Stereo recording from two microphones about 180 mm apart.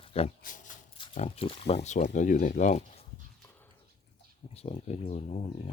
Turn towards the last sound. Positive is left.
turn(degrees=35)  # may be behind; listen again after turning